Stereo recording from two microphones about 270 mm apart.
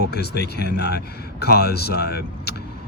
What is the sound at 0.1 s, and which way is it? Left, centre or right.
Speech, left.